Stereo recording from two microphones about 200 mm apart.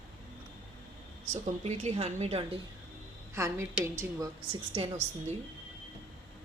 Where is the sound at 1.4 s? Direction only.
35° right (ahead or behind).